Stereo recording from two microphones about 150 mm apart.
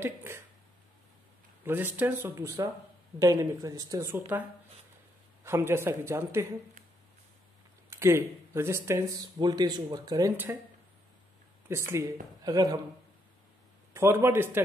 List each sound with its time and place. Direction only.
0.0 s a sound: 15° right (ahead or behind)
1.6 s speech: 15° right (ahead or behind)
5.4 s speech: 15° right (ahead or behind)
7.9 s speech: 20° right (ahead or behind)
10.3 s speech: 15° right (ahead or behind)
11.7 s speech: 20° right (ahead or behind)
13.9 s speech: 15° right (ahead or behind)